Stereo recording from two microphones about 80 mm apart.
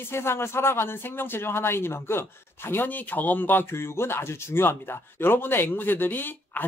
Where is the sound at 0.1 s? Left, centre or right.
Left.